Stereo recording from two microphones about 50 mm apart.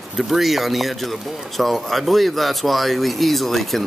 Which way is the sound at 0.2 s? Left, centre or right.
Centre.